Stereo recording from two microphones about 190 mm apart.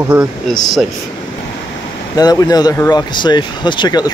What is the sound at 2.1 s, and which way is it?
Speech, 20° left (ahead or behind).